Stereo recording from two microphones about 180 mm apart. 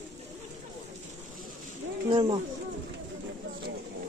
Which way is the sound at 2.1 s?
25° right (ahead or behind).